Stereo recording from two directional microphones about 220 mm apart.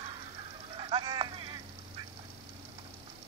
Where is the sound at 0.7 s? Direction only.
20° right (ahead or behind).